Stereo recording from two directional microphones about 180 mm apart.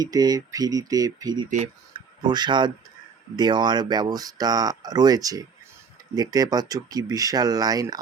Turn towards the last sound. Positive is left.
turn(degrees=-20)  # may be behind; listen again after turning